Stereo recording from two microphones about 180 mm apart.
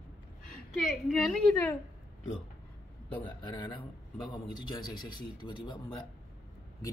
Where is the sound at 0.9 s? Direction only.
Centre (ahead or behind).